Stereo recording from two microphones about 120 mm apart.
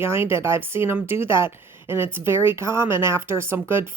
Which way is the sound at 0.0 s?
20° right (ahead or behind).